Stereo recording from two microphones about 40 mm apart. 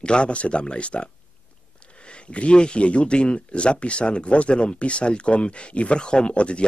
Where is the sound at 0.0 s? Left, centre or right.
Left.